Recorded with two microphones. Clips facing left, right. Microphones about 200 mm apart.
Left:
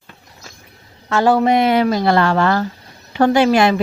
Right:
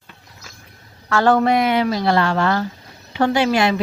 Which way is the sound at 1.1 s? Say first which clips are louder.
Left 1 dB; 15° left (ahead or behind).